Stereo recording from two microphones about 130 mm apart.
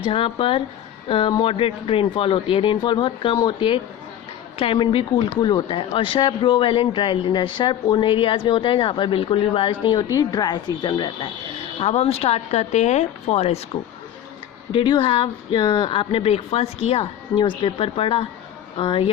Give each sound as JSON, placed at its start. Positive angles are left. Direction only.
{"t": 0.0, "sound": "speech", "side_deg": 45}
{"t": 9.8, "sound": "speech", "side_deg": 35}
{"t": 11.8, "sound": "speech", "side_deg": 50}
{"t": 14.7, "sound": "speech", "side_deg": 40}
{"t": 17.3, "sound": "speech", "side_deg": 40}